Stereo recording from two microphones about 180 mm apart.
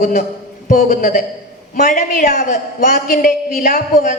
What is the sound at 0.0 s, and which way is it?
A woman's voice, 45° left (ahead or behind).